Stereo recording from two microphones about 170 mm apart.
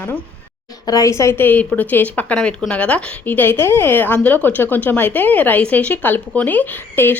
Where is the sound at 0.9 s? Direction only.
20° left (ahead or behind).